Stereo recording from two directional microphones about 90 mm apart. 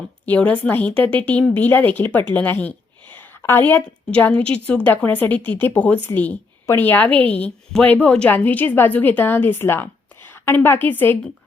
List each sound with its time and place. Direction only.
0.3 s a woman's voice: 15° left (ahead or behind)